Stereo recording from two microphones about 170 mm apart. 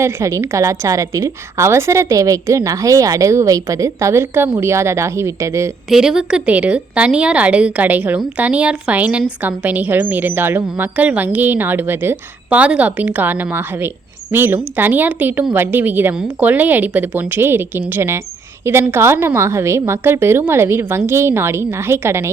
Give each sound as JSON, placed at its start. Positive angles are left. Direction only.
{"t": 0.0, "sound": "a woman's voice", "side_deg": -15}
{"t": 5.9, "sound": "a woman's voice", "side_deg": -5}